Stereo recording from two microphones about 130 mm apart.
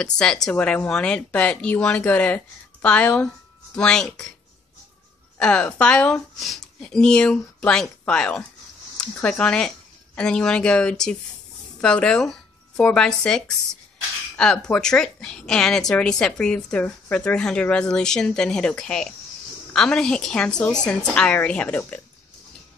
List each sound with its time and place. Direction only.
0.0 s a woman's voice: 5° left (ahead or behind)
5.4 s a woman's voice: 10° left (ahead or behind)